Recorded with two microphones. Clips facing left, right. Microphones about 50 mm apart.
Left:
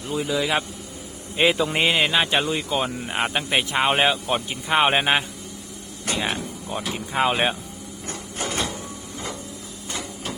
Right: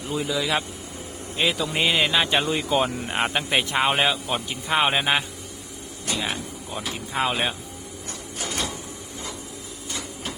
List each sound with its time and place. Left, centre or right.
0.0 s a man's voice: centre
0.3 s a man's voice: centre
6.2 s speech: centre
8.0 s printer: left